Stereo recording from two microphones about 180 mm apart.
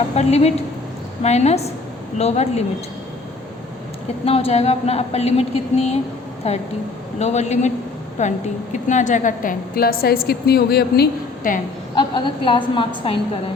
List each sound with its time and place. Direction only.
0.2 s a woman's voice: 35° left (ahead or behind)
4.3 s a woman's voice: 35° left (ahead or behind); by 11.6 s 55° left (ahead or behind)
11.9 s a woman's voice: 25° left (ahead or behind)